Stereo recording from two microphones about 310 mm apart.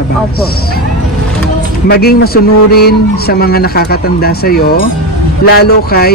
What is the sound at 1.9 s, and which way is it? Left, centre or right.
Speech, left.